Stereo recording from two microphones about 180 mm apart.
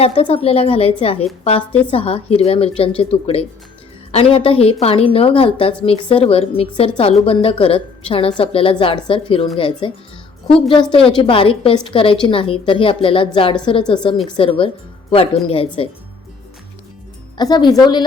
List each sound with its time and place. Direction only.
0.0 s a woman's voice: 30° left (ahead or behind)
17.3 s a woman's voice: 25° left (ahead or behind)